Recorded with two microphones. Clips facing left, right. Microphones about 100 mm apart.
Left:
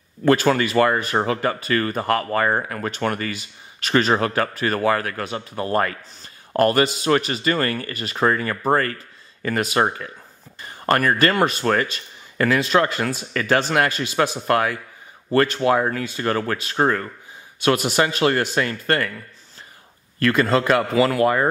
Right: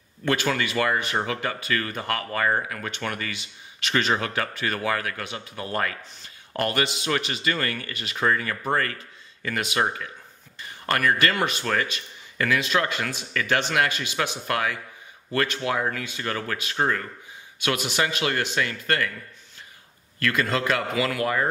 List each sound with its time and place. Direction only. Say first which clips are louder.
0.2 s speech: left 7 dB; 40° left (ahead or behind)
20.2 s speech: left 6 dB; 35° left (ahead or behind)